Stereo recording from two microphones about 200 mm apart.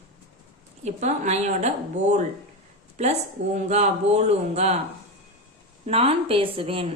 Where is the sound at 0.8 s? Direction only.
35° right (ahead or behind).